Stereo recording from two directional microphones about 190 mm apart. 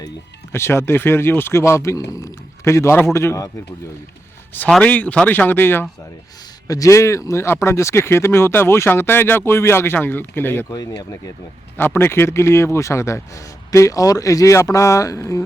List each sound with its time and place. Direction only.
0.5 s speech: 15° left (ahead or behind)
4.5 s speech: 5° left (ahead or behind)